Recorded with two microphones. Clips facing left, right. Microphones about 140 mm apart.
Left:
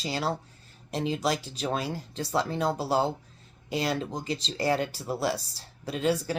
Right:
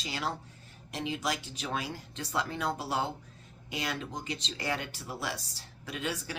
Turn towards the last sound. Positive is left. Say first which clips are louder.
# left 9 dB
turn(degrees=35)  # may be behind; listen again after turning